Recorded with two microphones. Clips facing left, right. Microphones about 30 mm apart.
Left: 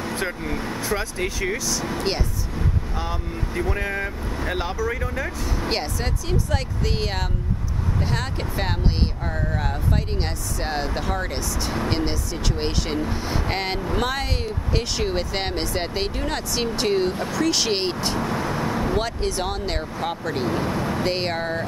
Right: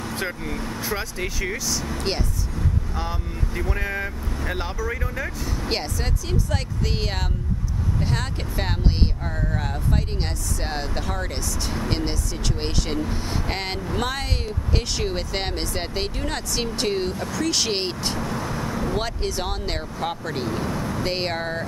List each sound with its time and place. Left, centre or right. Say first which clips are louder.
0.5 s speech: left 2 dB; centre
0.7 s speech: left 2 dB; centre
3.0 s speech: left 1 dB; centre
18.2 s vehicle: left 3 dB; left
18.9 s speech: left 2 dB; centre
20.4 s speech: left 3 dB; centre
21.0 s speech: left 2 dB; centre